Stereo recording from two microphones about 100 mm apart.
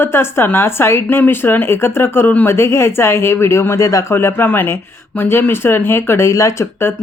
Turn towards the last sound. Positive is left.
turn(degrees=25)  # may be behind; listen again after turning